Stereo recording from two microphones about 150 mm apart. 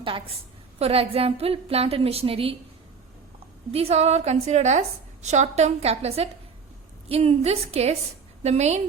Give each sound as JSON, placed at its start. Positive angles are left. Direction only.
{"t": 0.0, "sound": "a woman's voice", "side_deg": -35}
{"t": 3.7, "sound": "a woman's voice", "side_deg": -40}